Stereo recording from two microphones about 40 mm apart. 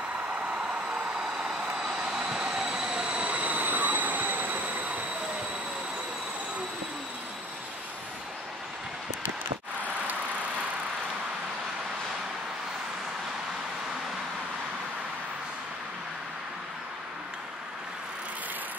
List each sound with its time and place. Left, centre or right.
0.6 s vehicle: right
1.5 s vehicle: centre
1.9 s train: right